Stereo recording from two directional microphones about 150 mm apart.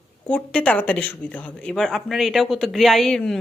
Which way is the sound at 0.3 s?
10° left (ahead or behind).